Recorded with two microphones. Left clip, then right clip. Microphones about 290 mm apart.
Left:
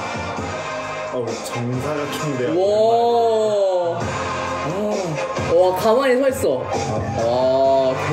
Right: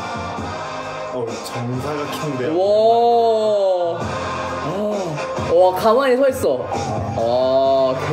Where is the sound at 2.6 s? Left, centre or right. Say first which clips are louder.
Right 2 dB; centre.